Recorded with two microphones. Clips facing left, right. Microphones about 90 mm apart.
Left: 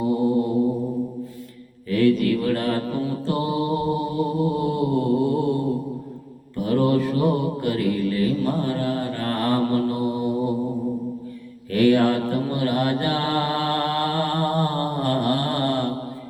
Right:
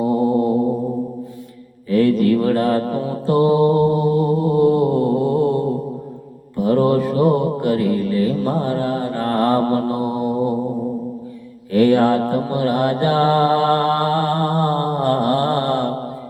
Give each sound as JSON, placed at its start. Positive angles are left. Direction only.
{"t": 0.0, "sound": "mantra", "side_deg": -45}
{"t": 1.9, "sound": "mantra", "side_deg": -40}
{"t": 6.7, "sound": "mantra", "side_deg": -40}
{"t": 9.4, "sound": "mantra", "side_deg": -40}
{"t": 11.8, "sound": "mantra", "side_deg": -40}